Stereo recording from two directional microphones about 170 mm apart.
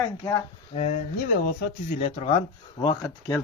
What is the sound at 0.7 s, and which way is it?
Speech, 45° left (ahead or behind).